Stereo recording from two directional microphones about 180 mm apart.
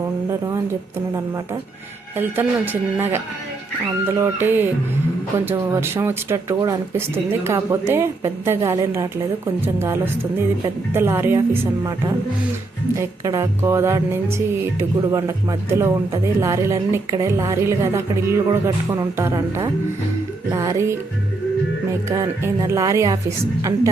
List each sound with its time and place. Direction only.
0.3 s a sound: 15° right (ahead or behind)
2.1 s music: 10° right (ahead or behind)
4.1 s music: 10° right (ahead or behind)
22.1 s music: 15° right (ahead or behind)